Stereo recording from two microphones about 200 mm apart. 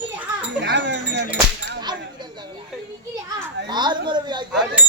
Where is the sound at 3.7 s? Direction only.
20° right (ahead or behind).